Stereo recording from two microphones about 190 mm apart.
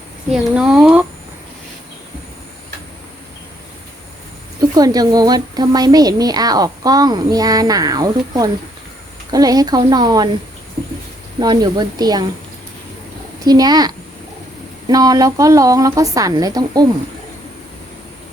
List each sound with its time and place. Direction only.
0.3 s speech: 5° right (ahead or behind)
4.7 s a woman's voice: 20° right (ahead or behind)
11.3 s a woman's voice: 20° right (ahead or behind)
13.4 s a woman's voice: 20° right (ahead or behind)